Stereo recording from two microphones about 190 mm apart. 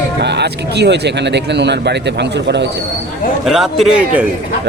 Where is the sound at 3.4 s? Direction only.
Centre (ahead or behind).